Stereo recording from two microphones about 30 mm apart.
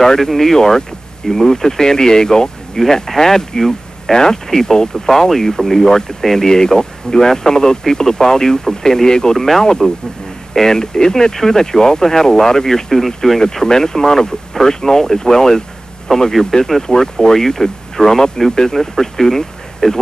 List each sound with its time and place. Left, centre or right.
0.0 s speech: centre
0.6 s speech: centre
2.8 s speech: centre
13.4 s speech: centre